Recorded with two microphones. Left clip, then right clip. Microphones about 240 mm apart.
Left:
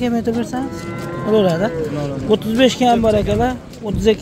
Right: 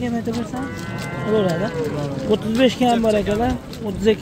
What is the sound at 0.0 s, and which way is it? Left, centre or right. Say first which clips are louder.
Speech: left 5 dB; centre.